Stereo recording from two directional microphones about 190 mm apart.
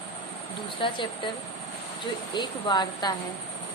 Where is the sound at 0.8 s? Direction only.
25° left (ahead or behind).